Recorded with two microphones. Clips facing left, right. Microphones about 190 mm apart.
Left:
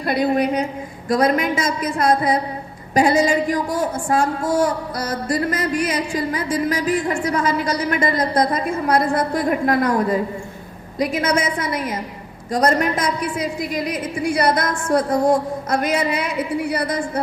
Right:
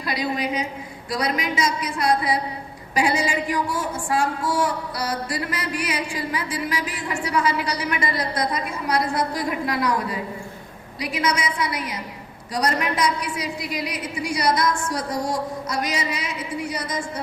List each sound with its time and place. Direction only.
0.1 s a woman's voice: 55° left (ahead or behind)